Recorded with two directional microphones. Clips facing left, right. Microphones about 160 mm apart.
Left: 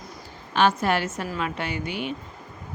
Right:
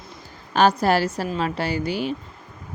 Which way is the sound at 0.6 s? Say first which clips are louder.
Right 4 dB; 35° right (ahead or behind).